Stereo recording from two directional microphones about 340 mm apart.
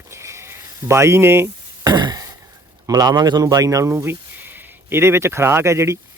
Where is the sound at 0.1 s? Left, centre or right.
Centre.